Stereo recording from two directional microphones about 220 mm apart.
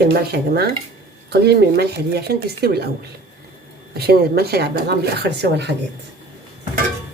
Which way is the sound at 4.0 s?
45° right (ahead or behind).